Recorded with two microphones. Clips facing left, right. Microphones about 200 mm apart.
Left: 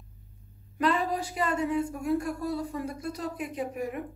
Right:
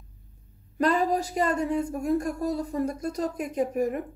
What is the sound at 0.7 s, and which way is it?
A woman's voice, 40° right (ahead or behind).